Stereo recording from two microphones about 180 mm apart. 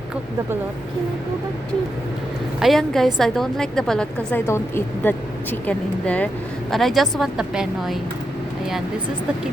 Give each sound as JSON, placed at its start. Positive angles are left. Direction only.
{"t": 2.6, "sound": "a woman's voice", "side_deg": 0}